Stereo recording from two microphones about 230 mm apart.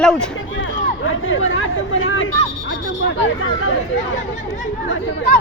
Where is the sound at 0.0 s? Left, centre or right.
Centre.